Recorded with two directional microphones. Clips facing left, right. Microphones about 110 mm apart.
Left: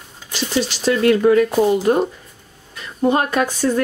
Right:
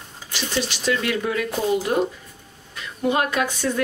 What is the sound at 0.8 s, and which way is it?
Speech, 40° left (ahead or behind).